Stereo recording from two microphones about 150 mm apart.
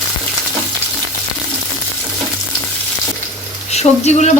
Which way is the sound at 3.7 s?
50° left (ahead or behind).